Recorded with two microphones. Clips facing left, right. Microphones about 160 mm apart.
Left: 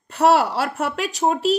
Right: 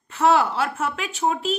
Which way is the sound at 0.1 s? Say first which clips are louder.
Left 2 dB; 40° left (ahead or behind).